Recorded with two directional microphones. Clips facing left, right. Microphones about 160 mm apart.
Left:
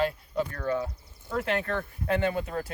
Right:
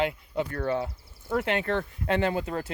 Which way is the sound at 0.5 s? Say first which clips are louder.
Right 1 dB; 30° right (ahead or behind).